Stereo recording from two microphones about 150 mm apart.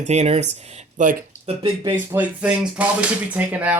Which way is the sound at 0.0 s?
50° right (ahead or behind).